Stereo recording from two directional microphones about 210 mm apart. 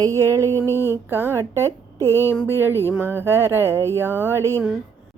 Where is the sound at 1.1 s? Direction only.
10° right (ahead or behind).